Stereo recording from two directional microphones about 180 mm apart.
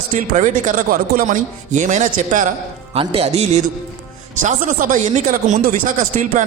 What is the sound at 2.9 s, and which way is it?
A man's voice, 35° right (ahead or behind).